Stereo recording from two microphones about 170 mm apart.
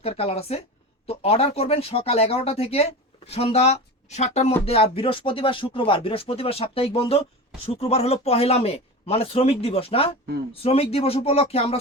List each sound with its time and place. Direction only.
0.0 s speech: 35° left (ahead or behind)